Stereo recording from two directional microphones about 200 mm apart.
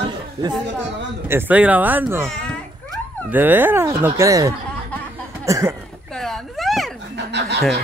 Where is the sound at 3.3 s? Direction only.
10° right (ahead or behind).